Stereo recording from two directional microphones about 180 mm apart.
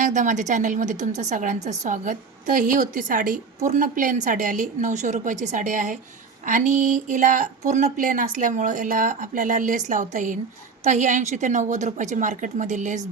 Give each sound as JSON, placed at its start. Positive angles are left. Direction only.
{"t": 0.0, "sound": "a woman's voice", "side_deg": -45}